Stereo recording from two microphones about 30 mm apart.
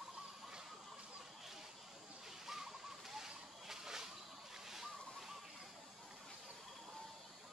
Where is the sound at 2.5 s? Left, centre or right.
Centre.